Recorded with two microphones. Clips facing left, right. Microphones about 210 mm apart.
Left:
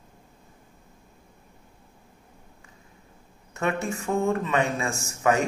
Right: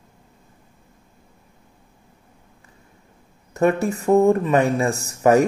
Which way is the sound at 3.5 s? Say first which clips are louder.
Right 8 dB; 35° right (ahead or behind).